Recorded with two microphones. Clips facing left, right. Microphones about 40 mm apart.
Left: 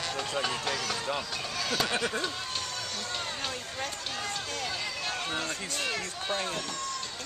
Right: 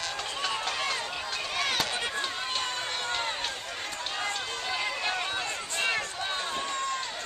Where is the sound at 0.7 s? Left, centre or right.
Right.